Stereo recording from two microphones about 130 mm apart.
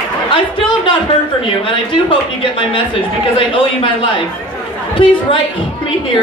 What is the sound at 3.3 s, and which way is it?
A woman's voice, 45° left (ahead or behind).